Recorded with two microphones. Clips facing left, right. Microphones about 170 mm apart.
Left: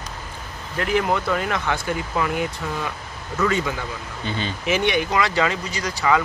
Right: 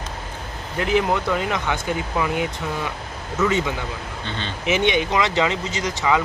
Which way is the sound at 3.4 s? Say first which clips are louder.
Right 1 dB; 20° right (ahead or behind).